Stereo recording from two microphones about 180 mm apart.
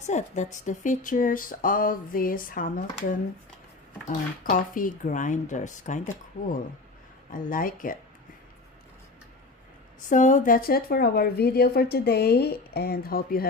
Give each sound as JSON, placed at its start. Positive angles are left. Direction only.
{"t": 0.0, "sound": "speech", "side_deg": 40}
{"t": 4.4, "sound": "speech", "side_deg": 50}
{"t": 7.3, "sound": "speech", "side_deg": 50}
{"t": 10.1, "sound": "speech", "side_deg": 45}